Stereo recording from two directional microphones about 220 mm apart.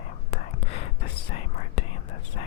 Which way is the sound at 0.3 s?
30° left (ahead or behind).